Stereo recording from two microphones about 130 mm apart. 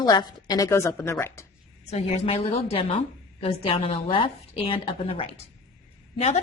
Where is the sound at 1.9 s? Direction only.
55° left (ahead or behind).